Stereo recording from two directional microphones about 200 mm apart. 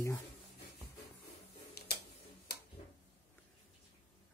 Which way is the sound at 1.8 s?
55° left (ahead or behind).